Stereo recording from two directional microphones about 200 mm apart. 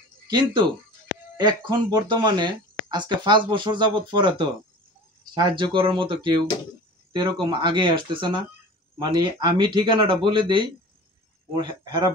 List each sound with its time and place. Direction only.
0.3 s speech: 20° right (ahead or behind)